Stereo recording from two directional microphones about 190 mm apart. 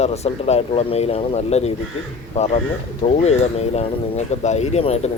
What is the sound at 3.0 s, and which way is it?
Speech, 35° left (ahead or behind).